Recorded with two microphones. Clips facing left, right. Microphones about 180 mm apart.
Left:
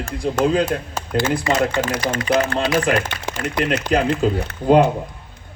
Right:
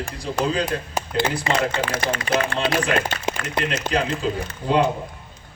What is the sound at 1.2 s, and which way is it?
Speech, 50° left (ahead or behind).